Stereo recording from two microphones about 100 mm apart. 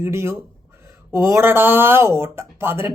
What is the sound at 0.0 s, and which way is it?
Speech, 25° right (ahead or behind).